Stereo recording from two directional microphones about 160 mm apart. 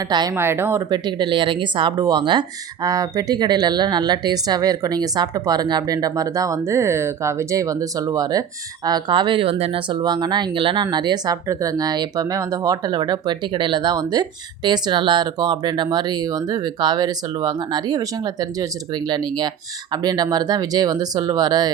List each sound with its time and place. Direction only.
0.3 s speech: 15° right (ahead or behind)
0.9 s speech: 30° right (ahead or behind)